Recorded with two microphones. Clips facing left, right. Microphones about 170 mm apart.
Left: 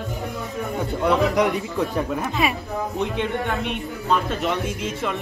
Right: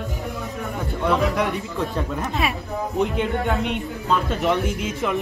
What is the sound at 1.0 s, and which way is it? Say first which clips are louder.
Speech: left 2 dB; 20° left (ahead or behind).